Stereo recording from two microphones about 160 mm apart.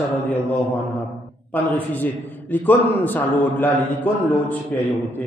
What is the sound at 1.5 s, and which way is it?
A man's voice, 10° left (ahead or behind).